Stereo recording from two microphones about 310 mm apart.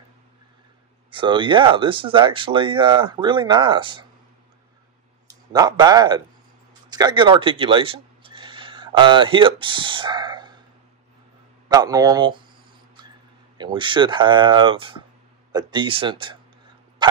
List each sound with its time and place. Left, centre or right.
1.1 s speech: centre
5.5 s speech: centre
11.7 s speech: centre
13.6 s speech: centre
17.0 s bow-wow: centre